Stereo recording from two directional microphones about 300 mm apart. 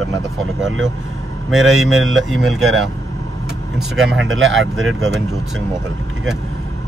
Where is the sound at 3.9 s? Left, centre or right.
Centre.